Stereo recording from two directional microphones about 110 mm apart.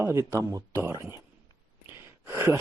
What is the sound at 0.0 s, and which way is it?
Speech, 25° right (ahead or behind).